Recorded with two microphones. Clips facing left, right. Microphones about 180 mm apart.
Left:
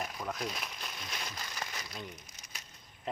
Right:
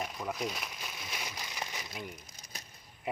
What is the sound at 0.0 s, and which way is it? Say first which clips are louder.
Crumpling: right 2 dB; centre (ahead or behind).